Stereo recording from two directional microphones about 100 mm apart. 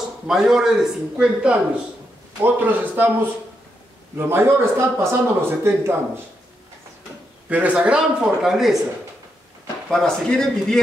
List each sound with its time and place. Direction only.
0.3 s a man's voice: 5° right (ahead or behind); by 5.9 s 25° right (ahead or behind)
7.4 s a man's voice: 15° right (ahead or behind)
9.8 s speech: 5° left (ahead or behind)